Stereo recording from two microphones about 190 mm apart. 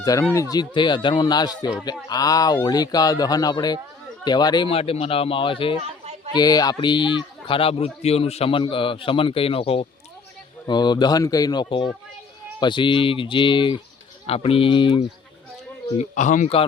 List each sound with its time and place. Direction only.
0.0 s speech: 20° left (ahead or behind)
16.0 s speech: 40° left (ahead or behind)